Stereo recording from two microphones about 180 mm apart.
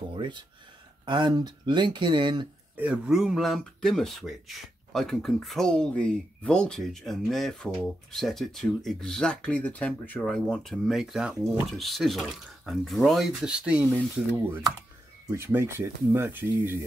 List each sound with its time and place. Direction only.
0.1 s speech: 25° right (ahead or behind)
2.8 s speech: 5° right (ahead or behind)